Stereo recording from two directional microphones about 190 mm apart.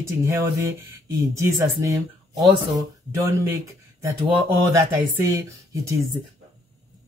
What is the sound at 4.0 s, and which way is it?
Speech, 15° right (ahead or behind).